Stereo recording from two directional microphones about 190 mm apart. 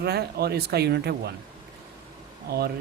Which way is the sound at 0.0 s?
55° right (ahead or behind).